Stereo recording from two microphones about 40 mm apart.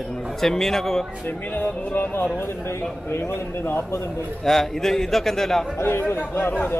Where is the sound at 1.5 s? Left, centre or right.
Left.